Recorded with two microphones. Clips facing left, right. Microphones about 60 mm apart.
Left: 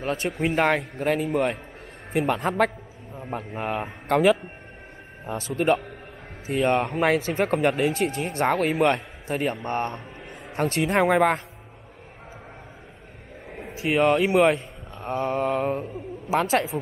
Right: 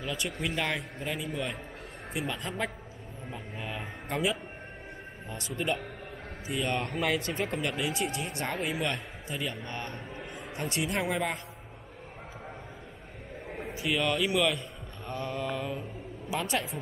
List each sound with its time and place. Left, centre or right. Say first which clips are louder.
0.0 s a man's voice: left 8 dB; left
6.4 s a man's voice: left 9 dB; left
7.3 s speech: left 10 dB; left
13.5 s a sound: left 1 dB; centre
13.8 s a man's voice: left 9 dB; left